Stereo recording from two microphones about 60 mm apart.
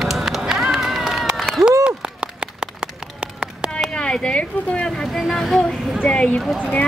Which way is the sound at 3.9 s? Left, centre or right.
Centre.